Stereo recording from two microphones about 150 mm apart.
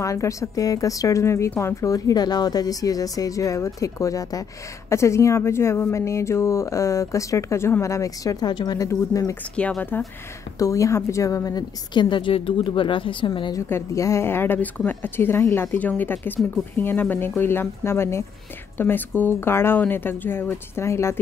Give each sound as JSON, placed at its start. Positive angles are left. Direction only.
{"t": 0.0, "sound": "speech", "side_deg": 20}
{"t": 9.6, "sound": "a woman's voice", "side_deg": 10}
{"t": 13.7, "sound": "speech", "side_deg": 20}